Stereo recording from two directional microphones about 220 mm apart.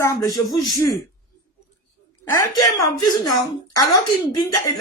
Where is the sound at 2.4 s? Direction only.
15° left (ahead or behind).